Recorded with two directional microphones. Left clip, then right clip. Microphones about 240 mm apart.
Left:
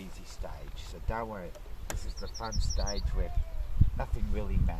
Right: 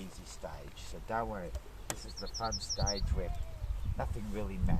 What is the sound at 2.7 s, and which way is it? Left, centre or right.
Speech, right.